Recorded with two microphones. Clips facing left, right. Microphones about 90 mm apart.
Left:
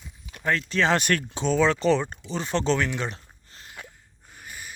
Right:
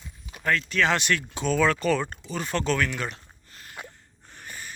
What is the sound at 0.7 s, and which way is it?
Speech, 30° left (ahead or behind).